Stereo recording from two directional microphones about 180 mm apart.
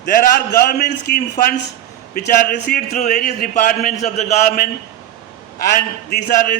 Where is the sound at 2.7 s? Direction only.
45° left (ahead or behind).